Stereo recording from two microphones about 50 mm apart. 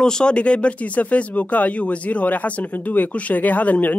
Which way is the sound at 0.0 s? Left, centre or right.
Centre.